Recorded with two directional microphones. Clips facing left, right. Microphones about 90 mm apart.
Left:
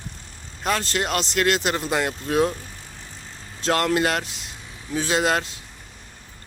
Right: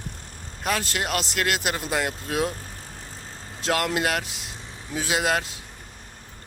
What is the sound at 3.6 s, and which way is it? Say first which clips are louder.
Speech: left 3 dB; 10° right (ahead or behind).